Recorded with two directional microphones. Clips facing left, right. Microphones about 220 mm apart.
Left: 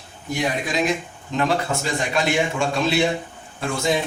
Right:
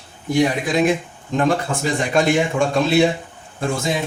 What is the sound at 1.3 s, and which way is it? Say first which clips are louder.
Speech: right 3 dB; 50° right (ahead or behind).